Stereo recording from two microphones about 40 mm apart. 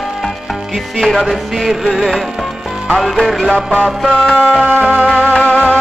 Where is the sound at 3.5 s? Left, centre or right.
Left.